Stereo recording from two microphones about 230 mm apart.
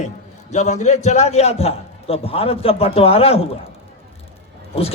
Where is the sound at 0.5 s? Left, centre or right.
Left.